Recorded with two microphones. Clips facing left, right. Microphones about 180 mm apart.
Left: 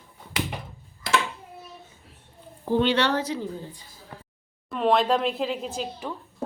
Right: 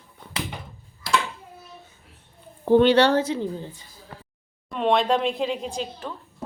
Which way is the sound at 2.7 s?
55° right (ahead or behind).